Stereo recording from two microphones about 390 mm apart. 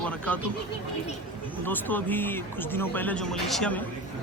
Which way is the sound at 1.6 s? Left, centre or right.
Centre.